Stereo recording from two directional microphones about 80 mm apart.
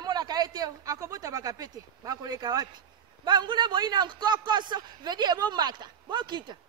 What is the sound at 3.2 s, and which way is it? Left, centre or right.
A man's voice, right.